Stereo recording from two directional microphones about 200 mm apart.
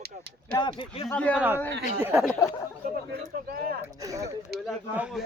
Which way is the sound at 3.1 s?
50° right (ahead or behind).